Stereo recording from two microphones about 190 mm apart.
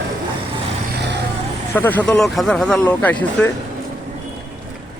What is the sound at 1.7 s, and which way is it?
Speech, 10° left (ahead or behind).